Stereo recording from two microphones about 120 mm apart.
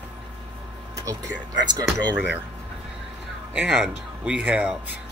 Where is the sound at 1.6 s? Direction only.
35° right (ahead or behind).